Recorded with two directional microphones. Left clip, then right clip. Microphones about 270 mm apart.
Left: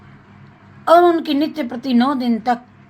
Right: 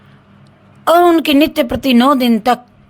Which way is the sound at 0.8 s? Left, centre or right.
Right.